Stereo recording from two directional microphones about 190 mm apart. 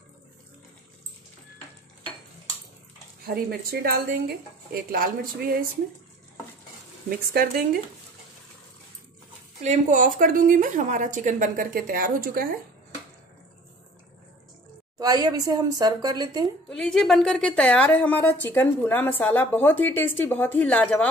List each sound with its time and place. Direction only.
3.3 s speech: 55° right (ahead or behind)
7.1 s speech: 50° right (ahead or behind)
9.6 s speech: 40° right (ahead or behind)
15.0 s a woman's voice: 20° right (ahead or behind)
16.6 s a woman's voice: 5° left (ahead or behind)